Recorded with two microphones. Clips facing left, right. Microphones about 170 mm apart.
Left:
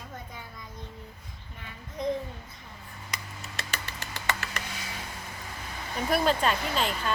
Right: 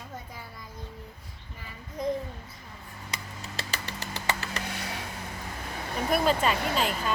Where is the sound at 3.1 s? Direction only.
30° right (ahead or behind).